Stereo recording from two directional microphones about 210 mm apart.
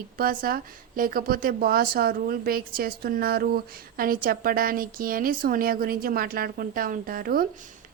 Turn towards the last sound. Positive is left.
turn(degrees=-45)  # may be behind; listen again after turning